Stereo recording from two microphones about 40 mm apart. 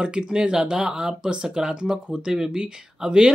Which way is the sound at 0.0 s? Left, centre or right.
Right.